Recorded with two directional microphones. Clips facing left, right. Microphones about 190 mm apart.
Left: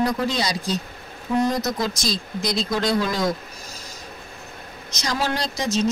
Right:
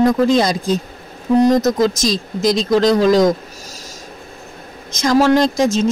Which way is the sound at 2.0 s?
90° right.